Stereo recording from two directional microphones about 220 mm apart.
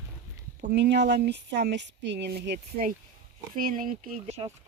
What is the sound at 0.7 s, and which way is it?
Speech, 50° right (ahead or behind).